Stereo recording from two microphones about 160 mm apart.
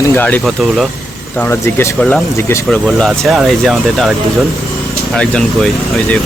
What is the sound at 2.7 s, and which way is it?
Speech, centre (ahead or behind).